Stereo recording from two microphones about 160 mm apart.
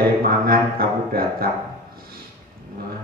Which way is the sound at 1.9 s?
70° right (ahead or behind).